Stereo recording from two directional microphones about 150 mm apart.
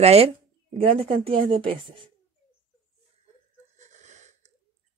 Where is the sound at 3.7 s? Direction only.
50° right (ahead or behind).